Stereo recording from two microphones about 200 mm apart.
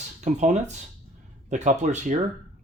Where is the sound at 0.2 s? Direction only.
35° right (ahead or behind).